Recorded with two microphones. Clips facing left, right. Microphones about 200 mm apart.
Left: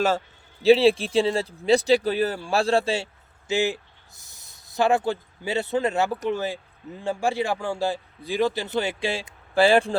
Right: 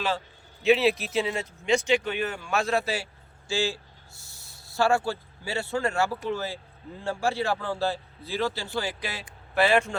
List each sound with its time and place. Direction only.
0.6 s a man's voice: 30° left (ahead or behind)